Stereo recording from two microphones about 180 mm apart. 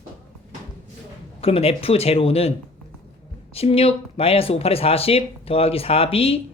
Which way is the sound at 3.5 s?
35° left (ahead or behind).